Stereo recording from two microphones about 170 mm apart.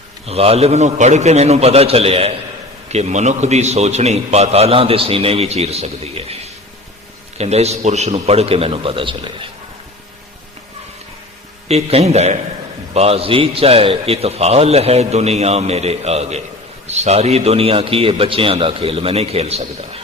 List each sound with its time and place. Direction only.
0.3 s a man's voice: 35° right (ahead or behind)
11.7 s a man's voice: 40° right (ahead or behind)